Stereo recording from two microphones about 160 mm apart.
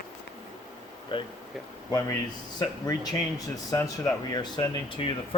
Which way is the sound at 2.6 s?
25° left (ahead or behind).